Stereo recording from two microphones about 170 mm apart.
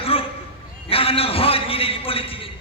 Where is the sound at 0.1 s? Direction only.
35° left (ahead or behind).